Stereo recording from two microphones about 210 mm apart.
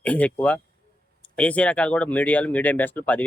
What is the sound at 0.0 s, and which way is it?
A man's voice, 5° left (ahead or behind).